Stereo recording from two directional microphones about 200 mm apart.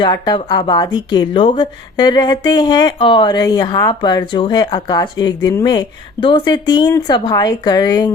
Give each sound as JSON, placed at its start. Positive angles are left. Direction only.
{"t": 0.0, "sound": "speech", "side_deg": 20}